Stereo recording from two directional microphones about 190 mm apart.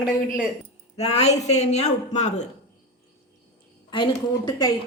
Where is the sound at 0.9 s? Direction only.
35° left (ahead or behind).